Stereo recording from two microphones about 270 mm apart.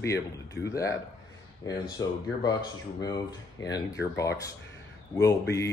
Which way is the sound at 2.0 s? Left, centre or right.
Centre.